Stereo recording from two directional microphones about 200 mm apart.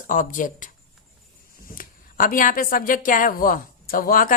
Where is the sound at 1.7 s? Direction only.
45° left (ahead or behind).